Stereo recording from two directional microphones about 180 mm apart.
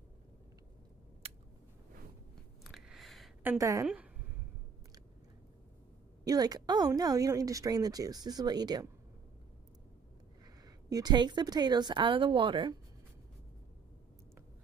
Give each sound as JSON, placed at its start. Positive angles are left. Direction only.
{"t": 2.6, "sound": "a sound", "side_deg": 0}
{"t": 3.4, "sound": "a woman's voice", "side_deg": -20}
{"t": 3.8, "sound": "speech", "side_deg": -5}
{"t": 6.2, "sound": "speech", "side_deg": -20}
{"t": 10.9, "sound": "speech", "side_deg": -20}